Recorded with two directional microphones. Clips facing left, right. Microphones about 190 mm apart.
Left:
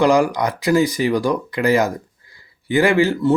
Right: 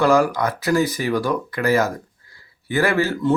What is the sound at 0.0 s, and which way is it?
Speech, 15° left (ahead or behind).